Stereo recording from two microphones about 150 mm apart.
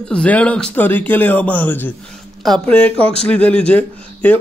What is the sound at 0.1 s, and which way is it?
Speech, 5° left (ahead or behind).